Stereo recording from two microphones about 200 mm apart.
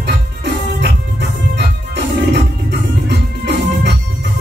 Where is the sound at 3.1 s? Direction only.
60° right (ahead or behind).